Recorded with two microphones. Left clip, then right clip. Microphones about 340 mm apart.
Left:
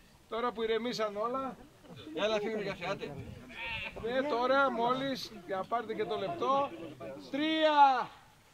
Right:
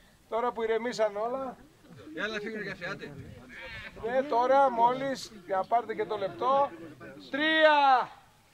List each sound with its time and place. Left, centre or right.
0.3 s speech: centre
2.1 s speech: centre
3.5 s sheep: centre
4.1 s speech: right